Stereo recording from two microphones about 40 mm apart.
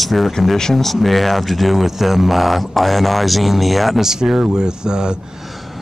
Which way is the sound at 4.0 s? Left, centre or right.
Centre.